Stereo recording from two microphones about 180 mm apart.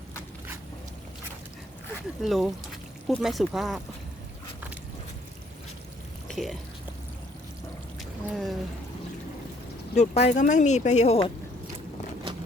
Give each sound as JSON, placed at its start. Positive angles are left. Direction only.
{"t": 2.2, "sound": "speech", "side_deg": 0}
{"t": 6.2, "sound": "a sound", "side_deg": 0}
{"t": 7.9, "sound": "boat", "side_deg": 0}
{"t": 9.9, "sound": "speech", "side_deg": 40}